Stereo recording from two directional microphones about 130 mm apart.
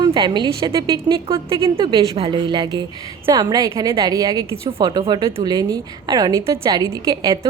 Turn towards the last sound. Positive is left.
turn(degrees=-25)  # may be behind; listen again after turning